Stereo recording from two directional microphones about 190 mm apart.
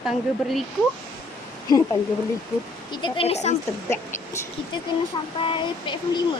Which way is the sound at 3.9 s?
15° left (ahead or behind).